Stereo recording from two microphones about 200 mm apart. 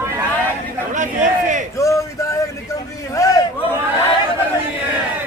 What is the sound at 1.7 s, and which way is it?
Speech, 15° left (ahead or behind).